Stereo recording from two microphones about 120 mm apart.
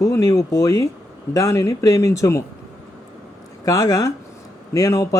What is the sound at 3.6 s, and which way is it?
Speech, 30° left (ahead or behind).